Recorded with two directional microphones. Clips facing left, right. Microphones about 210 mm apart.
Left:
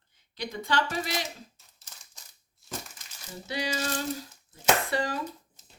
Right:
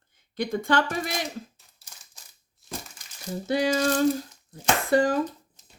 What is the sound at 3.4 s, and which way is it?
Speech, 50° right (ahead or behind).